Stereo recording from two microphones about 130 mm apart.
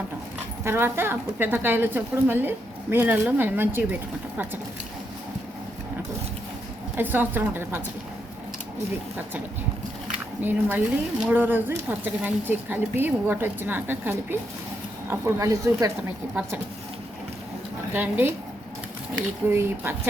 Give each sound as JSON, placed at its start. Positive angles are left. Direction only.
{"t": 0.6, "sound": "speech", "side_deg": -20}
{"t": 6.9, "sound": "speech", "side_deg": -15}
{"t": 10.1, "sound": "speech", "side_deg": -15}
{"t": 17.9, "sound": "speech", "side_deg": -15}
{"t": 19.5, "sound": "speech", "side_deg": -20}